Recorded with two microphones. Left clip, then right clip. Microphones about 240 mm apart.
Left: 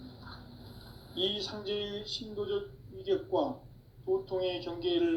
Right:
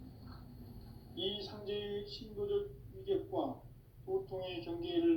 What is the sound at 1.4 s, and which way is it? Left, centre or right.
A man's voice, left.